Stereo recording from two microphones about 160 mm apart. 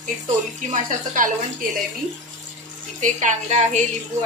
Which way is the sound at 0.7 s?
55° right (ahead or behind).